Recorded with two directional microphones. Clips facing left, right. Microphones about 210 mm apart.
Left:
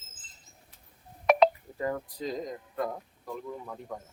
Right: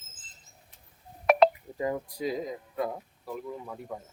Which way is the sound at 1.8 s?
15° right (ahead or behind).